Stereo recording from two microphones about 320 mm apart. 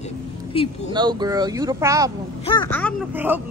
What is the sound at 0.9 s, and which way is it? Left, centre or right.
A woman's voice, centre.